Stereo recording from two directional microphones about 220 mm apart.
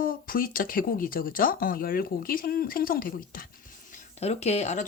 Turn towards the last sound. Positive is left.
turn(degrees=30)  # may be behind; listen again after turning